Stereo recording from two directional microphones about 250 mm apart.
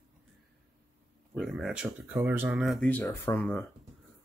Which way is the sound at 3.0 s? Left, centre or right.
Centre.